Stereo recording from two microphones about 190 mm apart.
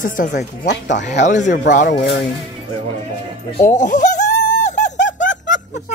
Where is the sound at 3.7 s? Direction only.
40° left (ahead or behind).